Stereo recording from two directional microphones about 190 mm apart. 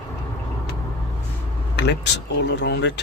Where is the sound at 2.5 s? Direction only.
60° left (ahead or behind).